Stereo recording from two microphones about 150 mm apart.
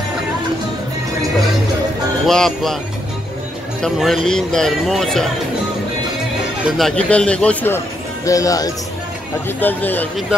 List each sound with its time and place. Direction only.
2.2 s speech: centre (ahead or behind)
3.8 s speech: centre (ahead or behind)
6.8 s a man's voice: 5° left (ahead or behind)
8.3 s speech: 20° left (ahead or behind)
9.6 s a man's voice: 15° left (ahead or behind)